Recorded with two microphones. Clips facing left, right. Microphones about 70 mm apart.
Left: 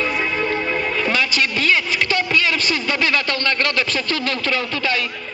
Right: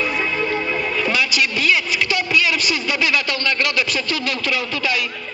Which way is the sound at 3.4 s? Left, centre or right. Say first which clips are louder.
Even; left.